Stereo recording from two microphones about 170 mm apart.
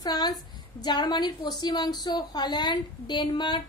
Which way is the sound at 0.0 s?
20° left (ahead or behind).